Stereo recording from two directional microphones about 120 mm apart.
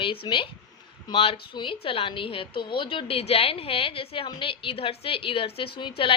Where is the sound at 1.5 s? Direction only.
40° left (ahead or behind).